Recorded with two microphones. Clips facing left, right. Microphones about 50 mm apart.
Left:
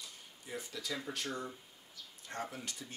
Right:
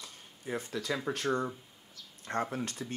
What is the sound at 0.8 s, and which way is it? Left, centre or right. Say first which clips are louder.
Speech: right 8 dB; right.